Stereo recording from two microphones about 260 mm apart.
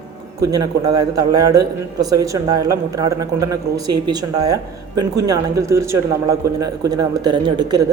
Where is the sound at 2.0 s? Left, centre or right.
Centre.